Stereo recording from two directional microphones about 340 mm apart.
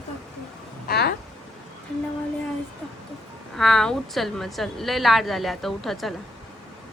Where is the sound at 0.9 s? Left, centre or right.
Left.